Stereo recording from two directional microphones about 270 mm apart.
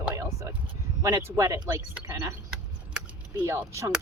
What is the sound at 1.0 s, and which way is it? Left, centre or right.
Speech, centre.